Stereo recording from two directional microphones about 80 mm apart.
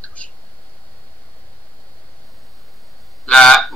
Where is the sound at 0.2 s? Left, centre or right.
Centre.